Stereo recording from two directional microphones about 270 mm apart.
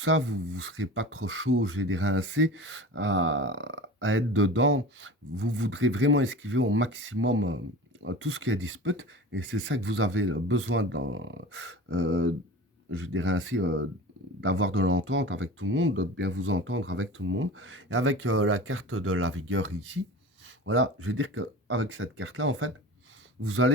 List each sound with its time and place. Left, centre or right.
0.0 s speech: right